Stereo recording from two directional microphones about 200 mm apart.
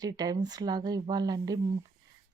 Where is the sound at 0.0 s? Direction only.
20° right (ahead or behind).